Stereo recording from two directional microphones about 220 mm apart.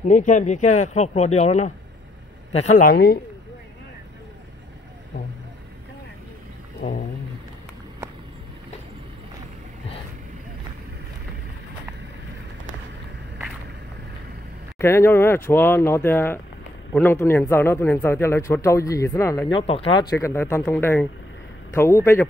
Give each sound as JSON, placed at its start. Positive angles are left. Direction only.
{"t": 0.1, "sound": "speech", "side_deg": 35}
{"t": 2.8, "sound": "speech", "side_deg": 45}
{"t": 14.8, "sound": "a man's voice", "side_deg": 10}
{"t": 19.6, "sound": "a man's voice", "side_deg": 25}